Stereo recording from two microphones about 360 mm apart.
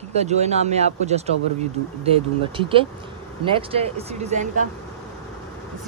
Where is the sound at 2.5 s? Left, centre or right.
Centre.